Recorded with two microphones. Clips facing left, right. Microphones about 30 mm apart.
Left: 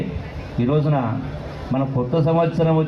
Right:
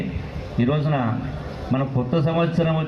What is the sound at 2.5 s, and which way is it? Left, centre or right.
Speech, centre.